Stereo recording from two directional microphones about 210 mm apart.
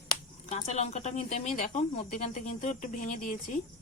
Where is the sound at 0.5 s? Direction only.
30° left (ahead or behind).